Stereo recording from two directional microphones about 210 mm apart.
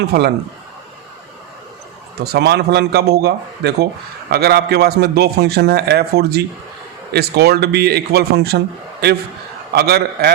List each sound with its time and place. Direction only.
2.1 s a man's voice: 50° right (ahead or behind)